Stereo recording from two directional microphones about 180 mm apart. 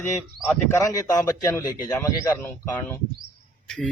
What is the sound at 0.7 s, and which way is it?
Speech, 20° left (ahead or behind).